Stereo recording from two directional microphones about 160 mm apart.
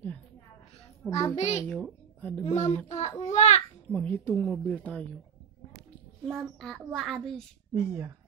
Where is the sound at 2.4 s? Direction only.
45° left (ahead or behind).